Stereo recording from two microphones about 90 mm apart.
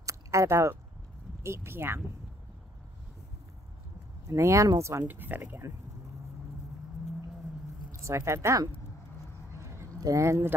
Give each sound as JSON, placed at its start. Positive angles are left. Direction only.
{"t": 0.0, "sound": "biting", "side_deg": -35}
{"t": 1.4, "sound": "speech", "side_deg": -30}
{"t": 4.3, "sound": "speech", "side_deg": -35}
{"t": 5.6, "sound": "speech", "side_deg": -35}
{"t": 7.9, "sound": "speech", "side_deg": -30}
{"t": 9.6, "sound": "a sound", "side_deg": -35}